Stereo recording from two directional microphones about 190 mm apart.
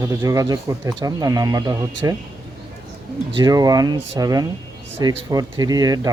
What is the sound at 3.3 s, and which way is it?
Speech, 20° right (ahead or behind).